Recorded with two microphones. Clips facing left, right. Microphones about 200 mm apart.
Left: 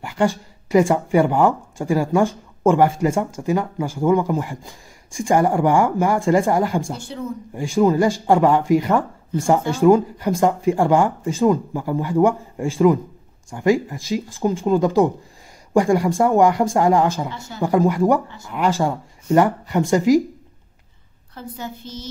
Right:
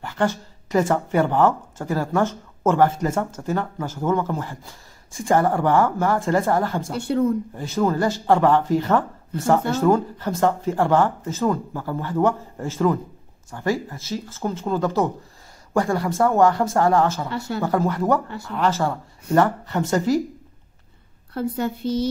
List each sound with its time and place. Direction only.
0.0 s speech: 10° left (ahead or behind)
7.0 s a woman's voice: 60° right (ahead or behind)
7.5 s speech: 15° left (ahead or behind)
17.3 s a woman's voice: 65° right (ahead or behind)
17.6 s speech: 15° left (ahead or behind)
21.3 s a woman's voice: 65° right (ahead or behind)